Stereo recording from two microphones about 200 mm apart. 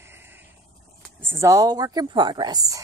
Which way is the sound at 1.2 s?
10° right (ahead or behind).